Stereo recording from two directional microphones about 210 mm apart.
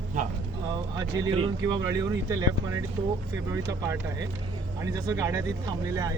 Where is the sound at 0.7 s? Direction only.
20° right (ahead or behind).